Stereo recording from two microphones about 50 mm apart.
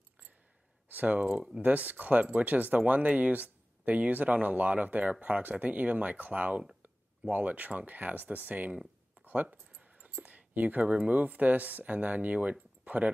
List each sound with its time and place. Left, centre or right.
0.8 s speech: right
1.3 s speech: centre
1.6 s speech: right
12.8 s a sound: right